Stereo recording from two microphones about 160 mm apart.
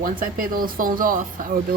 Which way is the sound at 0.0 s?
60° right (ahead or behind).